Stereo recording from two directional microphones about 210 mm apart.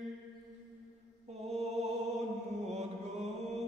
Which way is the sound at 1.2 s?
30° right (ahead or behind).